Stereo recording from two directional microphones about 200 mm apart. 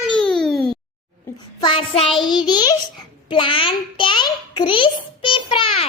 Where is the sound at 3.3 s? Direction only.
25° left (ahead or behind).